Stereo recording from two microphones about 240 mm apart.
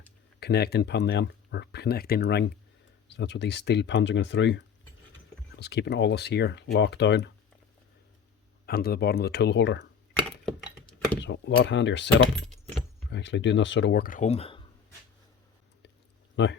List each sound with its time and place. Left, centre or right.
0.3 s speech: left
8.6 s speech: left
10.2 s a sound: centre
11.2 s speech: left
13.1 s speech: left
16.3 s speech: left